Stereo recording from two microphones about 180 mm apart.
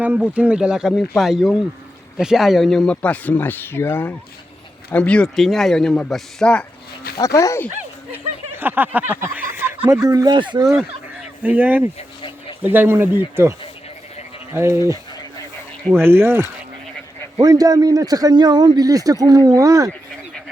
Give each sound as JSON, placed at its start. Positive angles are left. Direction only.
{"t": 0.0, "sound": "a man's voice", "side_deg": -10}
{"t": 7.2, "sound": "speech", "side_deg": 15}
{"t": 8.1, "sound": "speech", "side_deg": -10}
{"t": 11.4, "sound": "a man's voice", "side_deg": -10}